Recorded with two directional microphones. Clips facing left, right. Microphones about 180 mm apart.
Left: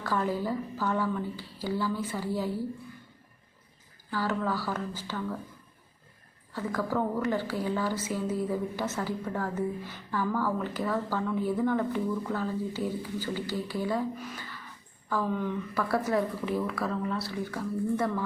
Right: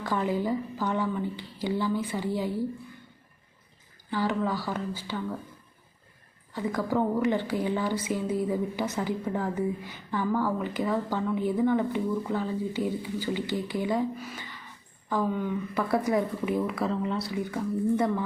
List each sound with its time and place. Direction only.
0.0 s a woman's voice: 15° right (ahead or behind)
4.1 s a woman's voice: 15° right (ahead or behind)
6.5 s a woman's voice: 15° right (ahead or behind)
15.3 s a woman's voice: 5° right (ahead or behind)
15.7 s a woman's voice: 20° right (ahead or behind)